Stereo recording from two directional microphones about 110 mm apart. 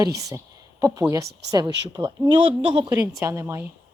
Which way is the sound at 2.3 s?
50° right (ahead or behind).